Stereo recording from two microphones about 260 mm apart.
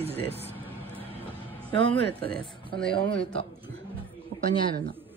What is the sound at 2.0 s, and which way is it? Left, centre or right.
Speech, left.